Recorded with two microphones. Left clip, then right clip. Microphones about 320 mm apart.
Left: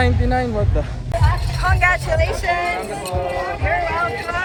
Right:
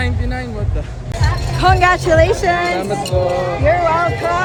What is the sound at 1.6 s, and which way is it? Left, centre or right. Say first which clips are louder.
Vehicle: right 5 dB; right.